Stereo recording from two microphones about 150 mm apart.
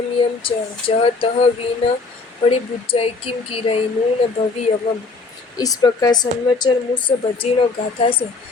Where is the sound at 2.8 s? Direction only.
40° left (ahead or behind).